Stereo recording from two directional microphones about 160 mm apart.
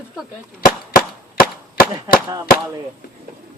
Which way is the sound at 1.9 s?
25° right (ahead or behind).